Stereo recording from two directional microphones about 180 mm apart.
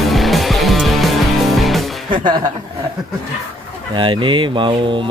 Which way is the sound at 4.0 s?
25° right (ahead or behind).